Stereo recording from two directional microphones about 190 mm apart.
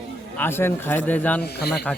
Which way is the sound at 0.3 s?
10° left (ahead or behind).